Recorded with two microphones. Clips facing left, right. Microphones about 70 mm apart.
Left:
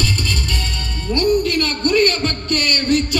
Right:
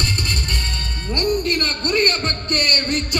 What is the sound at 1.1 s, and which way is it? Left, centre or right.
Music, right.